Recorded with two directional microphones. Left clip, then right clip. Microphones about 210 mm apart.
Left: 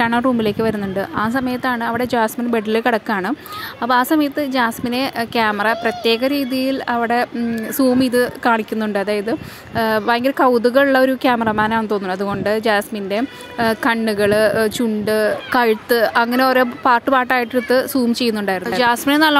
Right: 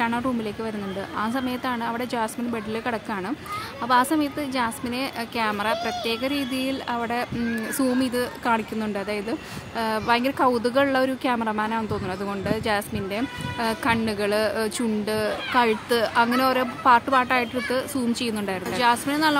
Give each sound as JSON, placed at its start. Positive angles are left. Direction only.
{"t": 0.0, "sound": "a woman's voice", "side_deg": 30}